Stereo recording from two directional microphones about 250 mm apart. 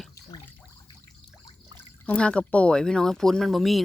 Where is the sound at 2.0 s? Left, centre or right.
Centre.